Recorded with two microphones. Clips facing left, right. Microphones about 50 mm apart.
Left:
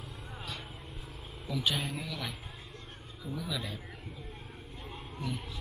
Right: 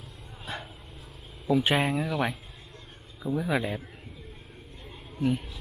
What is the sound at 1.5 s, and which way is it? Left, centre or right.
Speech, right.